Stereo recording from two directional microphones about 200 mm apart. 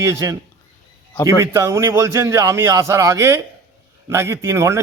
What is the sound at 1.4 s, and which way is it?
A man's voice, 15° right (ahead or behind).